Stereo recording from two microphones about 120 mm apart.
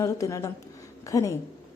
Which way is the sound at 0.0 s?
25° left (ahead or behind).